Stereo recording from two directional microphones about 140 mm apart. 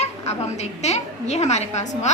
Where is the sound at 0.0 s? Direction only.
50° left (ahead or behind).